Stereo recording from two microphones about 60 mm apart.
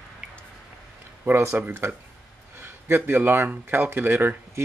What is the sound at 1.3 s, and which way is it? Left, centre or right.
Speech, right.